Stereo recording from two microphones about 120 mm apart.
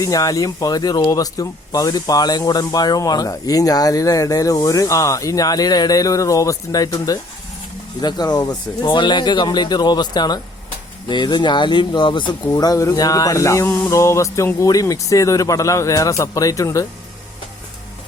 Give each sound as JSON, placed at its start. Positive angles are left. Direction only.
{"t": 0.0, "sound": "speech", "side_deg": 30}